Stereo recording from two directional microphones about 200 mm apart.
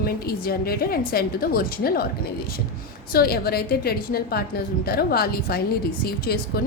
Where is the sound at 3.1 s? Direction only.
50° left (ahead or behind).